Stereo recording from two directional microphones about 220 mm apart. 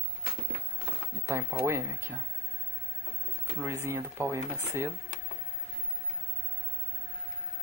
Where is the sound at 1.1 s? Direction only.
15° right (ahead or behind).